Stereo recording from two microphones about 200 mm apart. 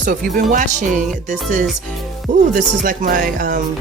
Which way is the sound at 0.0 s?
45° right (ahead or behind).